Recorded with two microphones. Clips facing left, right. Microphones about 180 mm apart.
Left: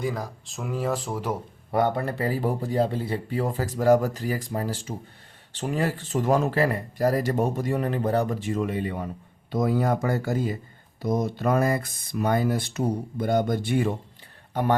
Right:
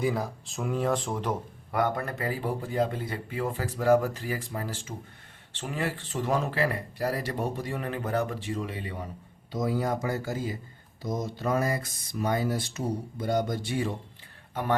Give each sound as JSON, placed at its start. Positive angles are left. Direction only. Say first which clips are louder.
{"t": 0.0, "sound": "speech", "louder": "right 1 dB", "side_deg": 0}
{"t": 1.7, "sound": "speech", "louder": "left 4 dB", "side_deg": 30}
{"t": 14.5, "sound": "a man's voice", "louder": "left 4 dB", "side_deg": 40}